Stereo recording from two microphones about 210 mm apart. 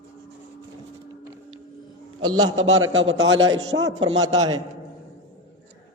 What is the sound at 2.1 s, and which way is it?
Speech, 20° right (ahead or behind).